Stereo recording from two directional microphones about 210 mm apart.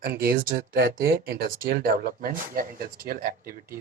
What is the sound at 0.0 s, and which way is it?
Speech, 45° right (ahead or behind).